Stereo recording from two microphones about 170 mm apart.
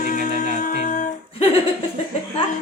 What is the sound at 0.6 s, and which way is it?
Music, 50° left (ahead or behind).